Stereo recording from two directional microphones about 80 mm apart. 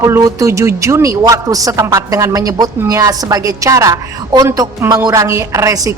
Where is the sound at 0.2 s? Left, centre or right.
Right.